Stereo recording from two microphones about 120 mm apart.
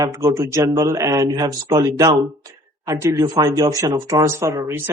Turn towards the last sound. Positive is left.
turn(degrees=-25)  # may be behind; listen again after turning